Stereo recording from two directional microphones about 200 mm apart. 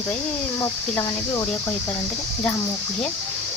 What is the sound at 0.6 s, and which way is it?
Speech, 15° left (ahead or behind).